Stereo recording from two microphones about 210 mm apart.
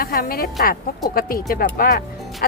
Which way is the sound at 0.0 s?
45° left (ahead or behind).